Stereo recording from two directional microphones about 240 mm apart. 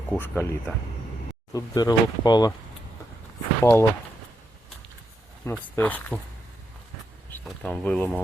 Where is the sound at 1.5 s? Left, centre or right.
Centre.